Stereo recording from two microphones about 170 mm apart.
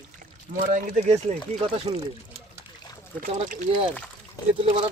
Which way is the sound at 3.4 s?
45° right (ahead or behind).